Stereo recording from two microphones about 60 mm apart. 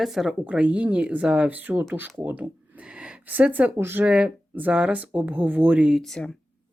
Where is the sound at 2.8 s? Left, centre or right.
Centre.